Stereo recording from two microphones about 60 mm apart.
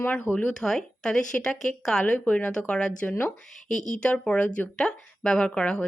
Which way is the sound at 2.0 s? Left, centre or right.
Left.